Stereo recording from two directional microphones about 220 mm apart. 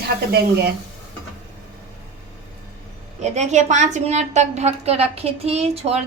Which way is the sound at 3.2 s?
30° right (ahead or behind).